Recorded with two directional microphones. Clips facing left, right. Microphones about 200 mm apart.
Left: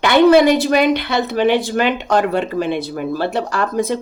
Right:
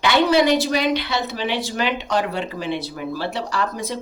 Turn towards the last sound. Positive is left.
turn(degrees=50)  # may be behind; listen again after turning